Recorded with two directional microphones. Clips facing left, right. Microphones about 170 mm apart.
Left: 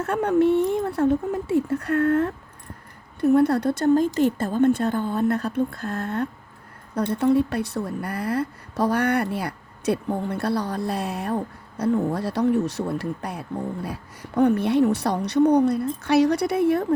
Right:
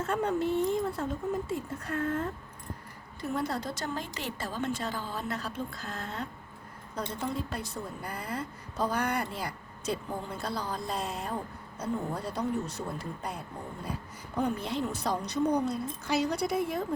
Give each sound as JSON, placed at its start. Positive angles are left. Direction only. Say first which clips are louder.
{"t": 0.0, "sound": "speech", "louder": "left 9 dB", "side_deg": 65}
{"t": 3.2, "sound": "a woman's voice", "louder": "left 14 dB", "side_deg": 60}
{"t": 11.8, "sound": "speech", "louder": "left 11 dB", "side_deg": 80}